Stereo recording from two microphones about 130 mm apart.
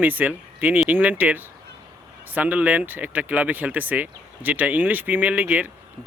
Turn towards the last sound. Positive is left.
turn(degrees=-10)  # may be behind; listen again after turning